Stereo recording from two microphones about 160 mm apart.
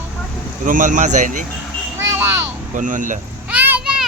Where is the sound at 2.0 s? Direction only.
15° right (ahead or behind).